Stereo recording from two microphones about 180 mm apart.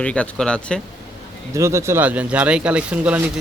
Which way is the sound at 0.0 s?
5° left (ahead or behind).